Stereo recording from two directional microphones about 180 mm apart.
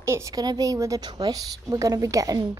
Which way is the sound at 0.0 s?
15° right (ahead or behind).